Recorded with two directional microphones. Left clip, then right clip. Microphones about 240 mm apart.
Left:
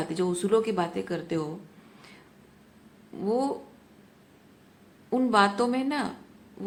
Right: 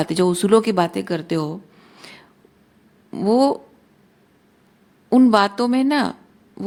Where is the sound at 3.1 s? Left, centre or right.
Right.